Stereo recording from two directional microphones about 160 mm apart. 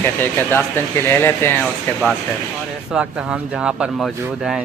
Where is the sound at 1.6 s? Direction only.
Centre (ahead or behind).